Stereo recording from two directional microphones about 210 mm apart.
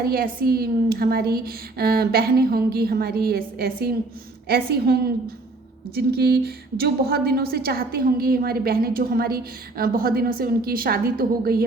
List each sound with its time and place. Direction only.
0.0 s a woman's voice: 45° right (ahead or behind)